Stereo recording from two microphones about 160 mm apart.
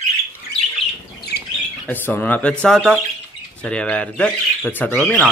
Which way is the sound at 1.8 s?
10° left (ahead or behind).